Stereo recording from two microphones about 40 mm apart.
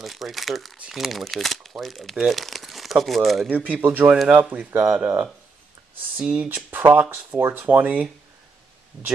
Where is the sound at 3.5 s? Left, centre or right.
Right.